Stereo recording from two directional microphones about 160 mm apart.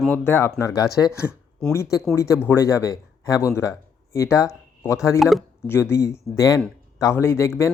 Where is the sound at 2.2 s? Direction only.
15° left (ahead or behind).